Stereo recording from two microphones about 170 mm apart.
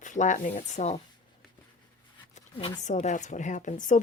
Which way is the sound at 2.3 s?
30° left (ahead or behind).